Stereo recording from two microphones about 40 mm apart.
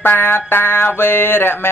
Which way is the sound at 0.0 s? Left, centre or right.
Left.